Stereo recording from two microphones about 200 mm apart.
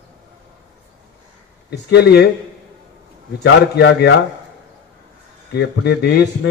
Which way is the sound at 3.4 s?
60° left (ahead or behind).